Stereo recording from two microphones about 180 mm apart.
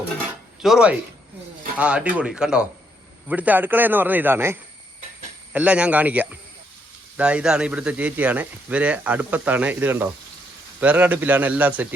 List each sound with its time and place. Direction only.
0.6 s a man's voice: 5° right (ahead or behind)
5.5 s a man's voice: 5° right (ahead or behind)